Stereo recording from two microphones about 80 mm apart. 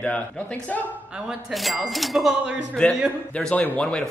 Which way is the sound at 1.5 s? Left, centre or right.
Centre.